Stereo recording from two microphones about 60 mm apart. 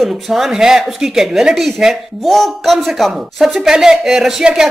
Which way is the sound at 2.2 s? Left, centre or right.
Centre.